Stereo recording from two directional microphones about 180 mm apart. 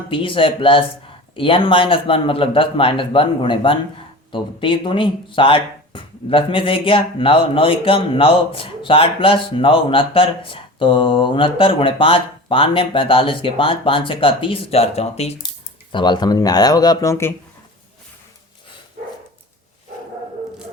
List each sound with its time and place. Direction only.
0.1 s speech: 30° left (ahead or behind)